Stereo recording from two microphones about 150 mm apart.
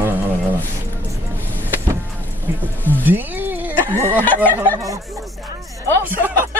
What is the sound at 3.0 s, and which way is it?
Music, 10° right (ahead or behind).